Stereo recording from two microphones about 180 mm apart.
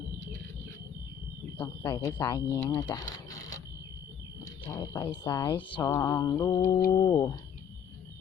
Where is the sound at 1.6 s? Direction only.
25° left (ahead or behind).